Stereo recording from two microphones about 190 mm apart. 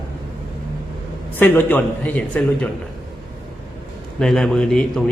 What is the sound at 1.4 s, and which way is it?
A man's voice, 10° left (ahead or behind).